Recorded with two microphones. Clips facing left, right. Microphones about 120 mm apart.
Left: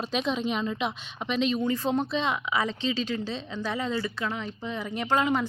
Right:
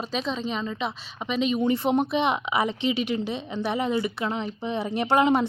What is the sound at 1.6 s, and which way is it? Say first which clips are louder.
A woman's voice: right 4 dB; 25° right (ahead or behind).